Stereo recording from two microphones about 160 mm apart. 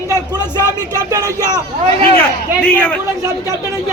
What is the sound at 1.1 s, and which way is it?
Speech, 20° right (ahead or behind).